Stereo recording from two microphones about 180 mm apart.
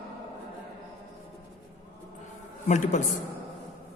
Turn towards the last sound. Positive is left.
turn(degrees=45)  # may be behind; listen again after turning